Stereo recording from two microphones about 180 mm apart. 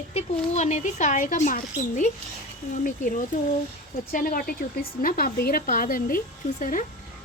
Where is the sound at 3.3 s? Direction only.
45° left (ahead or behind).